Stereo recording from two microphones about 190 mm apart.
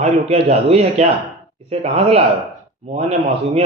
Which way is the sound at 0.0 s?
35° right (ahead or behind).